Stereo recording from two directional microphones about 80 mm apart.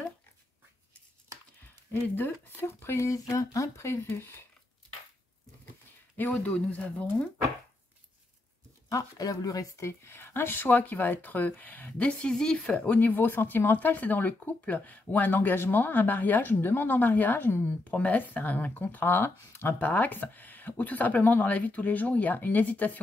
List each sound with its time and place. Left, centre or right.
1.9 s speech: left
6.1 s speech: left
8.9 s speech: left
17.9 s speech: centre